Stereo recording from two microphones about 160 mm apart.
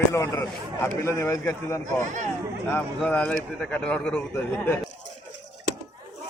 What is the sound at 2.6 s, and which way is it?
A man's voice, 10° left (ahead or behind).